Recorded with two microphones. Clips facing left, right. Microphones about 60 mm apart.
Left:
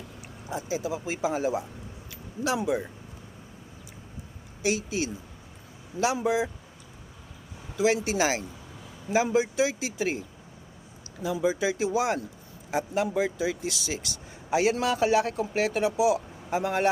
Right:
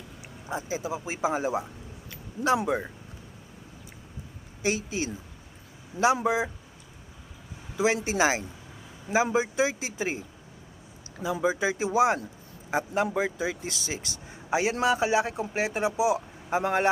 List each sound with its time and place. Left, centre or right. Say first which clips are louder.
0.5 s speech: left 1 dB; right
2.0 s a sound: right 4 dB; right
4.6 s speech: left 1 dB; right
6.2 s speech: even; right
7.8 s speech: even; right